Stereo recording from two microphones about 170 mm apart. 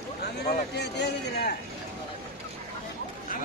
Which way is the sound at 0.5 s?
80° left.